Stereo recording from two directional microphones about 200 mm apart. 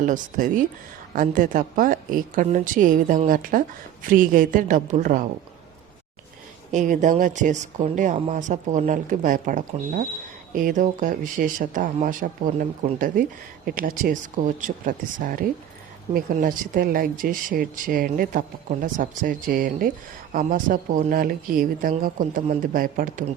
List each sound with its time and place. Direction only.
0.0 s a woman's voice: 40° right (ahead or behind)
6.7 s a woman's voice: 40° right (ahead or behind)